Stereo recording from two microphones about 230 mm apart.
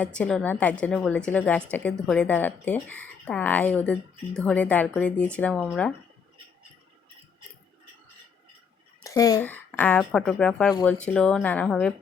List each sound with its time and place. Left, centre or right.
0.0 s a woman's voice: centre
9.0 s a woman's voice: centre